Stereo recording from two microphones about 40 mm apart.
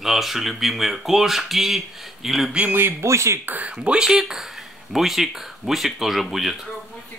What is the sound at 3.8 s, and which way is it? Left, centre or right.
Speech, right.